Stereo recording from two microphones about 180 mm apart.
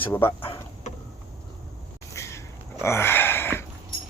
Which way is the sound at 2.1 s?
15° left (ahead or behind).